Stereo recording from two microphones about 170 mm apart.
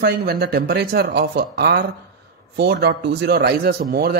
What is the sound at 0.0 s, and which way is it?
A man's voice, 70° right (ahead or behind).